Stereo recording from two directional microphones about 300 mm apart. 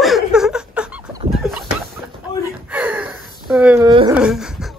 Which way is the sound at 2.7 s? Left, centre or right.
Centre.